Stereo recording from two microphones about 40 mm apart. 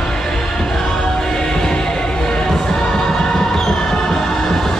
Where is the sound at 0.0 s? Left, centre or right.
Centre.